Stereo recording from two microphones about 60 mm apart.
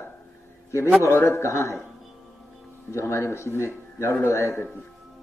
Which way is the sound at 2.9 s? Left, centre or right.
Left.